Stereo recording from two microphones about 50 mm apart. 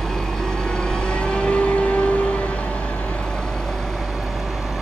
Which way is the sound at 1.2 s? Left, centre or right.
Centre.